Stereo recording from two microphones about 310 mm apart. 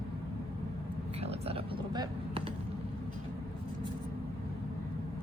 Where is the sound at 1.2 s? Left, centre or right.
Centre.